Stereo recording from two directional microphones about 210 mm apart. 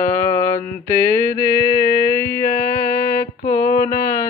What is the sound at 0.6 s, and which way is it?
Mantra, 40° left (ahead or behind).